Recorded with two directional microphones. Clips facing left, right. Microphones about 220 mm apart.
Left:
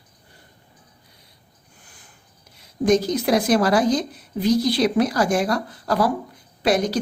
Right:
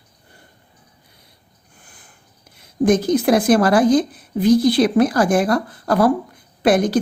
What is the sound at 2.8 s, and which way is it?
A woman's voice, 50° right (ahead or behind).